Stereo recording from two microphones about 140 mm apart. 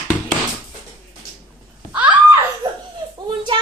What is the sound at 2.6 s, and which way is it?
Laughter, 30° right (ahead or behind).